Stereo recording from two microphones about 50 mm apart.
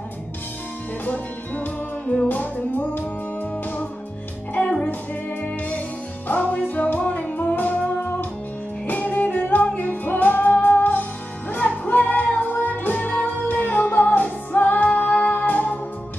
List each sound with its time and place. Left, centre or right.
1.0 s music: left
4.6 s music: left